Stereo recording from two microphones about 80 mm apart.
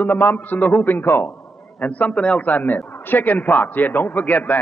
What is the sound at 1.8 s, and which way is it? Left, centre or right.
A man's voice, centre.